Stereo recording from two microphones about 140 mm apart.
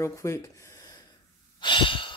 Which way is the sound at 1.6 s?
35° left (ahead or behind).